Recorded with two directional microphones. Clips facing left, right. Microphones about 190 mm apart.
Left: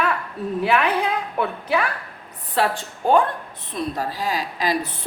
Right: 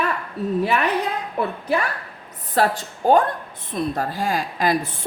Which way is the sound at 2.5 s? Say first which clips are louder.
Right 2 dB; 40° right (ahead or behind).